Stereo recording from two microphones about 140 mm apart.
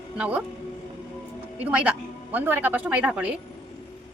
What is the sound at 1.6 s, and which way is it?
A woman's voice, 10° right (ahead or behind).